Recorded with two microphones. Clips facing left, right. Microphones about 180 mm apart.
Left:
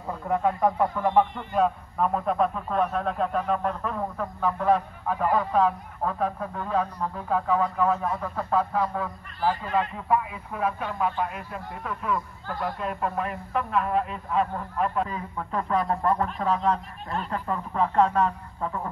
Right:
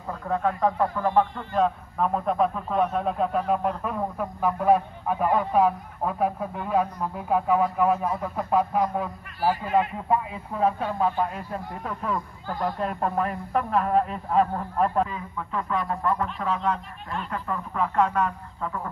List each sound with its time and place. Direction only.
0.3 s speech: 15° left (ahead or behind)
1.6 s a man's voice: centre (ahead or behind); by 15.0 s 40° right (ahead or behind)
15.0 s speech: 40° left (ahead or behind)